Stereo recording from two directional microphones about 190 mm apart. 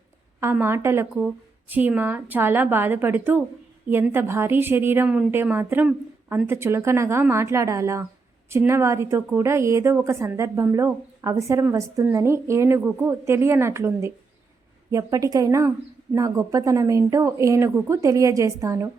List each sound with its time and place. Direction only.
0.3 s a woman's voice: 10° right (ahead or behind)